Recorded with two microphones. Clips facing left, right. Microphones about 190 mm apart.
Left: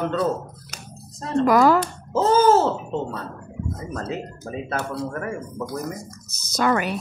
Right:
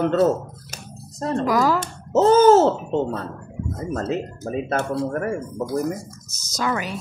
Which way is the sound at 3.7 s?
50° right (ahead or behind).